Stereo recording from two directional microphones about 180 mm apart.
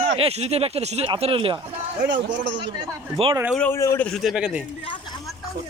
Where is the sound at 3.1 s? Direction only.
30° right (ahead or behind).